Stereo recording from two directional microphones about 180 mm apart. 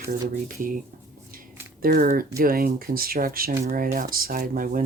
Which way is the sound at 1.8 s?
55° right (ahead or behind).